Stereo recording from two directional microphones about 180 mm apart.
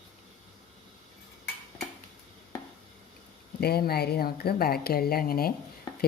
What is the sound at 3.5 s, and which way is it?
A woman's voice, 60° left (ahead or behind).